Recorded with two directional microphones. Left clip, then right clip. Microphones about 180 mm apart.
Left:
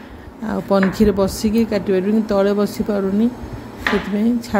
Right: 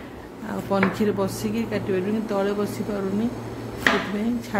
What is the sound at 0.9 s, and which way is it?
Speech, 35° left (ahead or behind).